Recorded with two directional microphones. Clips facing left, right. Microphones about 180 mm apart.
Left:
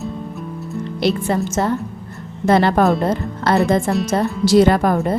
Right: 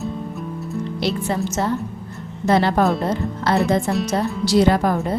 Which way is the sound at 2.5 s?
55° left (ahead or behind).